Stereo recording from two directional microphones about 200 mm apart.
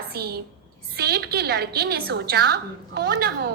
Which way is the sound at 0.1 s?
50° right (ahead or behind).